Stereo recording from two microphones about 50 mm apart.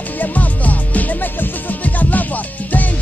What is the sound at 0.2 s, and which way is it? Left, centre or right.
Music, left.